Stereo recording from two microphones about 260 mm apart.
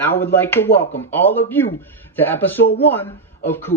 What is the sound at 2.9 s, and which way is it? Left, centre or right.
Speech, centre.